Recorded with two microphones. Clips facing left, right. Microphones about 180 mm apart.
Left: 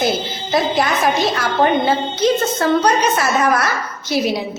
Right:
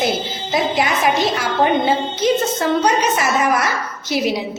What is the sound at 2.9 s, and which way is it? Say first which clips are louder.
A woman's voice: left 1 dB; 15° right (ahead or behind).